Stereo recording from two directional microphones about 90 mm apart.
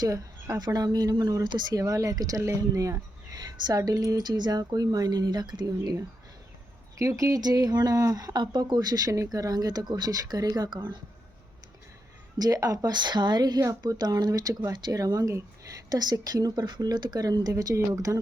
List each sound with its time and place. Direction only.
0.0 s a woman's voice: 40° right (ahead or behind)
7.0 s speech: 35° right (ahead or behind); by 10.8 s 55° right (ahead or behind)
12.4 s speech: 45° right (ahead or behind)